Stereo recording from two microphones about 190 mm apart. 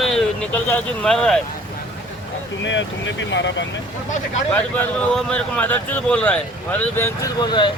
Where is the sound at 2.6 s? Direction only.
75° left (ahead or behind).